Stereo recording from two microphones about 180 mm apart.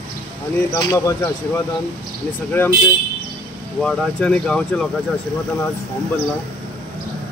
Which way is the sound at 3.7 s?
Centre (ahead or behind).